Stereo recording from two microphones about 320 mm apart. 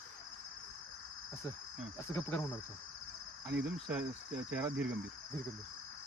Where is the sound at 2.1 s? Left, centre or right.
Centre.